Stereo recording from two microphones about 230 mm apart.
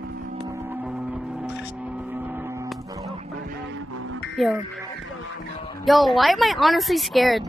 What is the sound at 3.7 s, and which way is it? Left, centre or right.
Music, right.